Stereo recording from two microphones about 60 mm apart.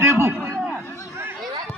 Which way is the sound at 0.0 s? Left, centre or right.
Right.